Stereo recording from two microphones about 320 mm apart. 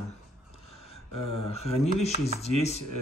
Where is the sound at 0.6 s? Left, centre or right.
Centre.